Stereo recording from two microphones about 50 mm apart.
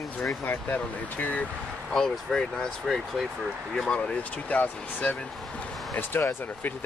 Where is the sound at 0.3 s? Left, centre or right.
Left.